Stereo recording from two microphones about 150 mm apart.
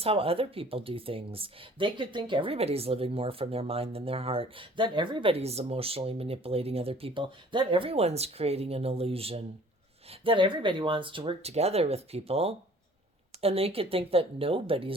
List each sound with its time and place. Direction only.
0.0 s speech: 40° right (ahead or behind)